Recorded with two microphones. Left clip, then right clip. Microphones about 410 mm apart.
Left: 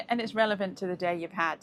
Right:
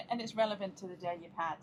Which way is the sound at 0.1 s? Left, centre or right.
Left.